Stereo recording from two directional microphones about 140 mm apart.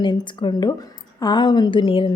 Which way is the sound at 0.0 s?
35° left (ahead or behind).